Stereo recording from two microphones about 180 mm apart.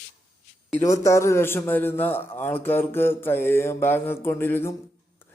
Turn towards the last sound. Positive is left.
turn(degrees=10)  # may be behind; listen again after turning